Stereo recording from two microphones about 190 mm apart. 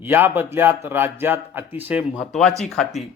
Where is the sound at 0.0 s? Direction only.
10° right (ahead or behind).